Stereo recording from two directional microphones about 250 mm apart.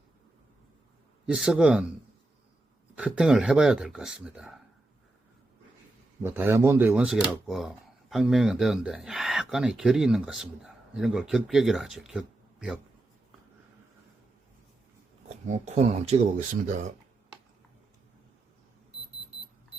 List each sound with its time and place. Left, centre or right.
1.3 s speech: centre
3.0 s speech: centre
6.2 s speech: centre
15.4 s speech: right